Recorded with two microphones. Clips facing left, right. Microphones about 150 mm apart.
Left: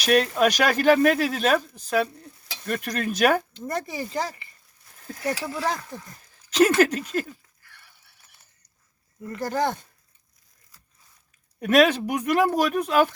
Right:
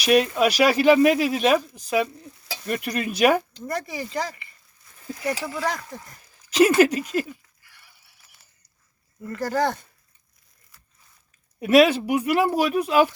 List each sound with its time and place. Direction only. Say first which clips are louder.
0.0 s speech: right 1 dB; 10° right (ahead or behind)
3.8 s speech: even; 35° left (ahead or behind)
5.5 s speech: even; 30° left (ahead or behind)
6.5 s a sound: right 2 dB; 10° right (ahead or behind)
9.2 s speech: right 2 dB; 15° left (ahead or behind)
11.6 s speech: right 2 dB; 10° right (ahead or behind)